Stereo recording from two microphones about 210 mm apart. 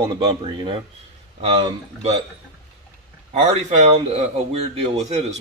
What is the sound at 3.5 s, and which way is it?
Speech, 30° right (ahead or behind).